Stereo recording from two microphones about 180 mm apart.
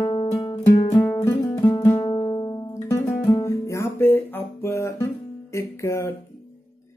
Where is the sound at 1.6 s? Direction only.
25° left (ahead or behind).